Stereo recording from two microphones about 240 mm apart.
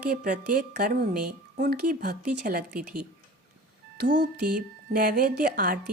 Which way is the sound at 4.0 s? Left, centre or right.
Right.